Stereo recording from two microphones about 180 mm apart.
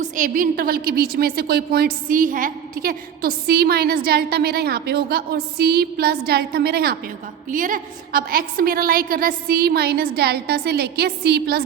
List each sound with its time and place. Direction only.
0.0 s a woman's voice: 50° right (ahead or behind)
7.5 s a woman's voice: 50° right (ahead or behind)